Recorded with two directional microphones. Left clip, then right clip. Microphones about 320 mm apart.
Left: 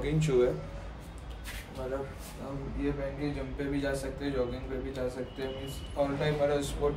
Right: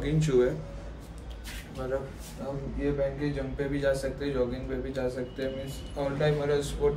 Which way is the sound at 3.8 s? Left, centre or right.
Centre.